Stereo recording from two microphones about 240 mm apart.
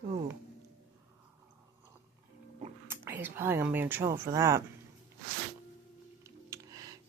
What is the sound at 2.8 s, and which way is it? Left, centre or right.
Speech, centre.